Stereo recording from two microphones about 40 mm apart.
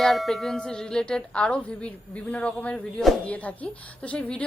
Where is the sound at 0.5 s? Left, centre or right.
Centre.